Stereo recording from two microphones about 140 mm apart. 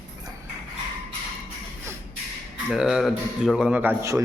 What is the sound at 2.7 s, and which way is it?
Speech, 5° right (ahead or behind).